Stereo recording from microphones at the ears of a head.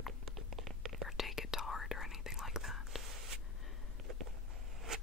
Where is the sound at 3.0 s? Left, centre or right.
Right.